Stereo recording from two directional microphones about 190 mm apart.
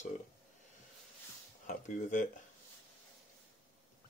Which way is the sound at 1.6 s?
40° left (ahead or behind).